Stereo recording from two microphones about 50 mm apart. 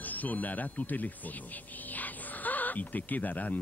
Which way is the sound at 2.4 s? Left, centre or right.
Left.